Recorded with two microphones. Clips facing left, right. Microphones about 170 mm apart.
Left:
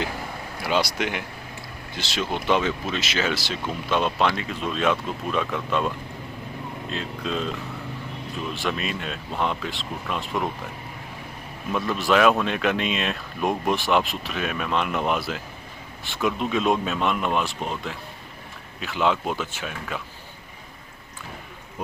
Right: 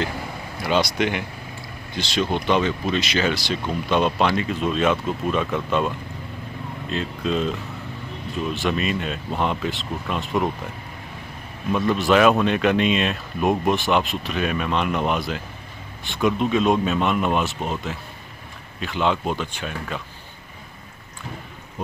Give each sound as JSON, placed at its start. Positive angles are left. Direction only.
{"t": 0.6, "sound": "speech", "side_deg": 10}
{"t": 8.5, "sound": "speech", "side_deg": 0}
{"t": 11.7, "sound": "speech", "side_deg": 0}